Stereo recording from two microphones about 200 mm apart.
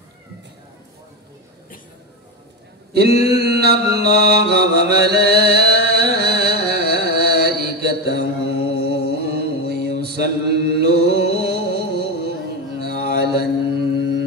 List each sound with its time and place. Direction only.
2.9 s mantra: 50° right (ahead or behind)